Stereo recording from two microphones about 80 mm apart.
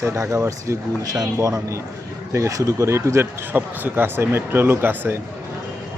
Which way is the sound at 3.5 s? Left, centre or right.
Right.